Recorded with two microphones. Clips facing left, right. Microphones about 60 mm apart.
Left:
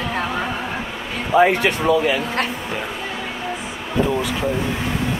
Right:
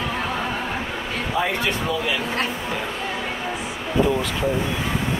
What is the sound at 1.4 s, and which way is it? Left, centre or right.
Speech, left.